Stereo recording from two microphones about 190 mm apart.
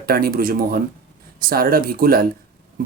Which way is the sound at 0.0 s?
50° right (ahead or behind).